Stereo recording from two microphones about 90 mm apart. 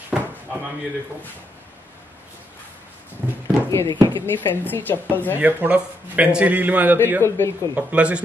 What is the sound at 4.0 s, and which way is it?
Speech, 55° right (ahead or behind).